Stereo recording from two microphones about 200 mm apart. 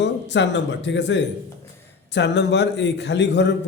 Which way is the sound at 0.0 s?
60° left (ahead or behind).